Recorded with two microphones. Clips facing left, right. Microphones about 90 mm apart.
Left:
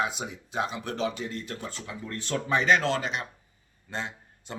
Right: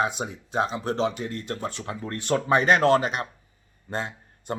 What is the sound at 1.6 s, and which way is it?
A man's voice, 50° right (ahead or behind).